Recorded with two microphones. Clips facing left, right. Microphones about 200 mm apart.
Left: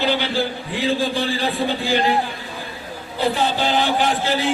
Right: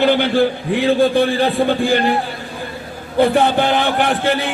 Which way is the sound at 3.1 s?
55° right (ahead or behind).